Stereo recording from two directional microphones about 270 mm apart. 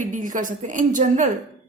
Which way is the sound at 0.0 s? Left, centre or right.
Right.